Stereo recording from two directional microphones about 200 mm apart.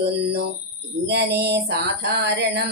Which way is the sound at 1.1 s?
55° right (ahead or behind).